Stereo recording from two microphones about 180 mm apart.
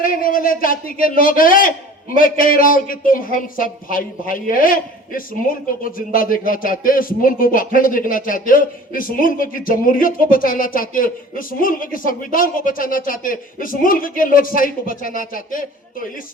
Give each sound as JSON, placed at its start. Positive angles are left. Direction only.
{"t": 0.0, "sound": "speech", "side_deg": 50}